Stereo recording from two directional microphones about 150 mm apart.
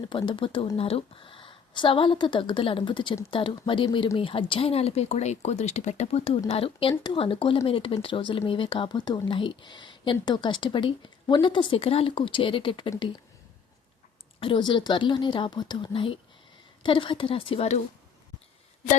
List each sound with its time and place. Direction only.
0.1 s speech: 35° left (ahead or behind)
14.3 s speech: 35° left (ahead or behind)